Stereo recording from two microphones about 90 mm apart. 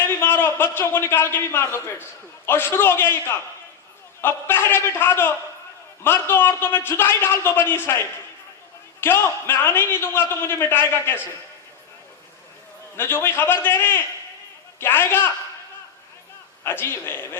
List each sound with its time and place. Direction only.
0.0 s a man's voice: 20° left (ahead or behind)
13.0 s a man's voice: 25° left (ahead or behind)
16.6 s a man's voice: 25° left (ahead or behind)